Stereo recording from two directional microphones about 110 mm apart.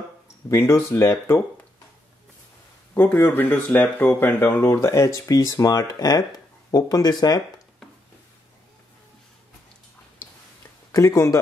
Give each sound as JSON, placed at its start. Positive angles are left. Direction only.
{"t": 0.5, "sound": "speech", "side_deg": 25}
{"t": 2.9, "sound": "speech", "side_deg": 20}
{"t": 10.2, "sound": "tick-tock", "side_deg": 20}
{"t": 10.9, "sound": "speech", "side_deg": 30}